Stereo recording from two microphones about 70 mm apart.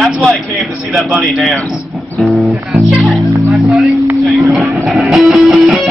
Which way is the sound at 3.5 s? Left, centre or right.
Centre.